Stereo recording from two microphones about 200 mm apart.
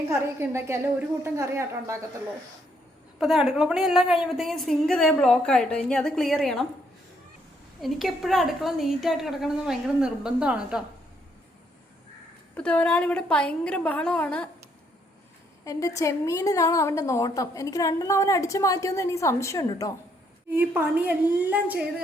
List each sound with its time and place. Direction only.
0.1 s a woman's voice: 15° right (ahead or behind)
3.2 s a woman's voice: centre (ahead or behind)
7.8 s a woman's voice: centre (ahead or behind)
12.5 s a woman's voice: 5° left (ahead or behind)
15.6 s a woman's voice: 15° left (ahead or behind)
20.5 s a woman's voice: 10° right (ahead or behind)